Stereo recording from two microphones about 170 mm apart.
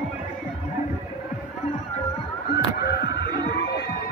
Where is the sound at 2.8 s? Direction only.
75° left (ahead or behind).